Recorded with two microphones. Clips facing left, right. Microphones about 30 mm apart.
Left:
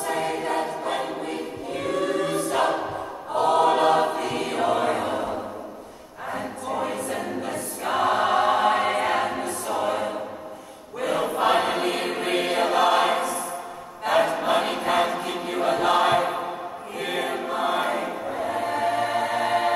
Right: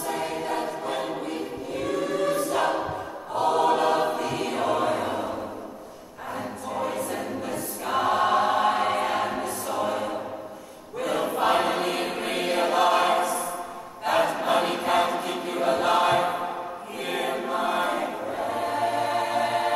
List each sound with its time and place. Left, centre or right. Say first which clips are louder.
0.0 s choir: left 3 dB; left
5.0 s a sound: left 2 dB; centre
6.3 s choir: left 2 dB; left